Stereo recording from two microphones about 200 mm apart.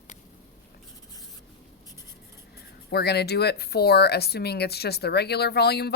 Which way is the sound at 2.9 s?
55° left (ahead or behind).